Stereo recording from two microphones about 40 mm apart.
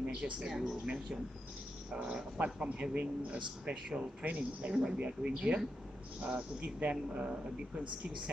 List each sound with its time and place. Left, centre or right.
0.0 s speech: right
2.3 s speech: right
6.9 s speech: right